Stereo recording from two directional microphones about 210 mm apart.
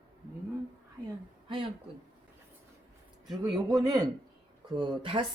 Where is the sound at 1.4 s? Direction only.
25° right (ahead or behind).